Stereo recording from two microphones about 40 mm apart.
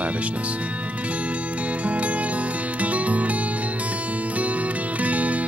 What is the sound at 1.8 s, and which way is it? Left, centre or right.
Music, right.